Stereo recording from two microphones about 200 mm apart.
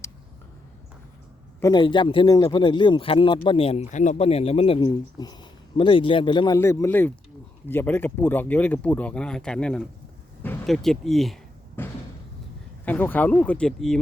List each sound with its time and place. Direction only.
1.6 s speech: 20° left (ahead or behind); by 11.3 s centre (ahead or behind)
11.8 s slam: 10° left (ahead or behind)
12.8 s speech: 10° left (ahead or behind)